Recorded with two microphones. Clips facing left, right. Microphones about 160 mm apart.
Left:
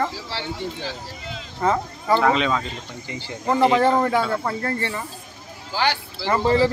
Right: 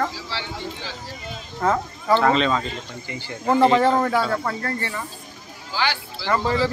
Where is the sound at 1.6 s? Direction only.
10° left (ahead or behind).